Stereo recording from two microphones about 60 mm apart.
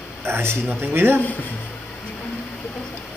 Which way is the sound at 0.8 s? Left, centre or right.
Right.